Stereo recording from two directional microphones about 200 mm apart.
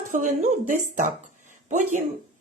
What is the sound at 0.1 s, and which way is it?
A woman's voice, 40° right (ahead or behind).